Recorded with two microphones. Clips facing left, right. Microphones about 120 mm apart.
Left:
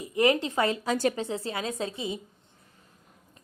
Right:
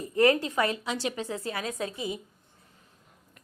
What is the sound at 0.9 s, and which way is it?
Speech, 45° left (ahead or behind).